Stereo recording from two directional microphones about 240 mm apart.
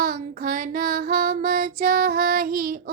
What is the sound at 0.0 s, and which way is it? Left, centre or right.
Child singing, right.